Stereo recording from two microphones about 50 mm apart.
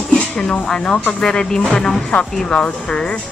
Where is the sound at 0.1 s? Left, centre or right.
Centre.